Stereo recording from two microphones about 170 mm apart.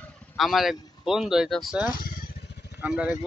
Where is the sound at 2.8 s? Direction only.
10° right (ahead or behind).